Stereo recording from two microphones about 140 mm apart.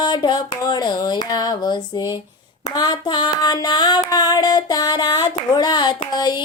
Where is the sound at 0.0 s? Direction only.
30° left (ahead or behind).